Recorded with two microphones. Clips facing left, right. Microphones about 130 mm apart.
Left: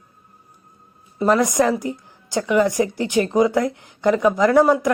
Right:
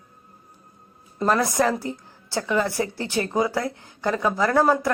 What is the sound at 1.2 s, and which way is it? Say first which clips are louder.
A woman's voice: left 4 dB; 15° left (ahead or behind).